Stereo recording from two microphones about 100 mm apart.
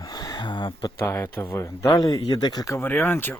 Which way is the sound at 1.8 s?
40° left (ahead or behind).